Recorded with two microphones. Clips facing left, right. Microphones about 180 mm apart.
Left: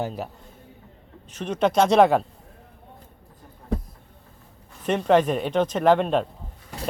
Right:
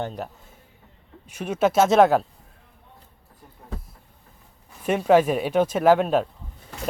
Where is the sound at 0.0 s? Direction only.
5° left (ahead or behind).